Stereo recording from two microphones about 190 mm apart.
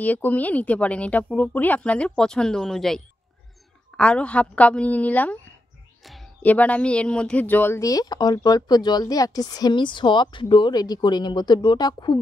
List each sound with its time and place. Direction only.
0.0 s speech: 10° left (ahead or behind)